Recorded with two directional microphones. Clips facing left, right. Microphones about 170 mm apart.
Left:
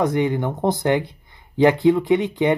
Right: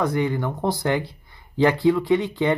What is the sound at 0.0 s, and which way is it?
Speech, 20° left (ahead or behind).